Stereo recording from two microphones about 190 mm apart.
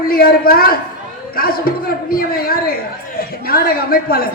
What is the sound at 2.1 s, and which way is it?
A woman's voice, 50° left (ahead or behind).